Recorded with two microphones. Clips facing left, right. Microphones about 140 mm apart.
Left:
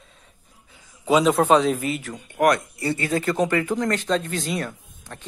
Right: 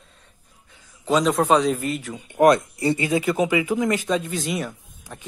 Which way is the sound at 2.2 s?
20° right (ahead or behind).